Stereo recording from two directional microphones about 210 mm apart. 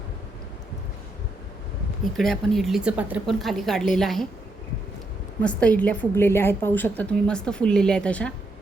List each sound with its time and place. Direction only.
2.1 s a woman's voice: centre (ahead or behind)
5.4 s a woman's voice: 5° left (ahead or behind)